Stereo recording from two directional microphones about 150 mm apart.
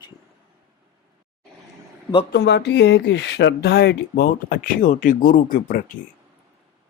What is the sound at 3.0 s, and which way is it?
Speech, 90° left.